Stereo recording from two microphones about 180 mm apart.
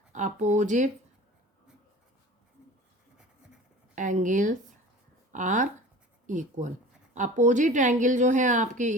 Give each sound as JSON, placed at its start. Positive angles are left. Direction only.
{"t": 0.1, "sound": "speech", "side_deg": -45}
{"t": 3.9, "sound": "speech", "side_deg": -45}